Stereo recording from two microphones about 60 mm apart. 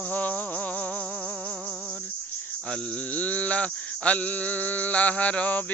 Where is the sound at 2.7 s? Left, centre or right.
Left.